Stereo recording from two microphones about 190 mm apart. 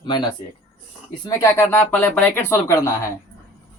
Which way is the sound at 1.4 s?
10° left (ahead or behind).